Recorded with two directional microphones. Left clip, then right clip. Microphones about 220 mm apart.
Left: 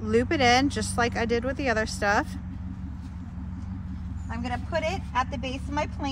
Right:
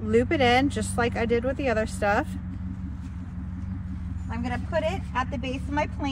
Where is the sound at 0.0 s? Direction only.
20° left (ahead or behind).